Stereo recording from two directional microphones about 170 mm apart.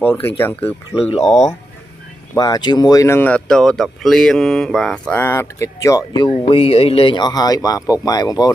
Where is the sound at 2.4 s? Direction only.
25° left (ahead or behind).